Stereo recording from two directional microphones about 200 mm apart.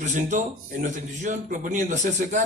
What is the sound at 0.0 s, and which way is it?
Speech, 40° right (ahead or behind).